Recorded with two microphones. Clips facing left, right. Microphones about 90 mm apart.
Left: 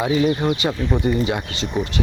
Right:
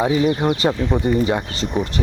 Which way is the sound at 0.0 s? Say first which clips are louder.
Right 1 dB; 40° right (ahead or behind).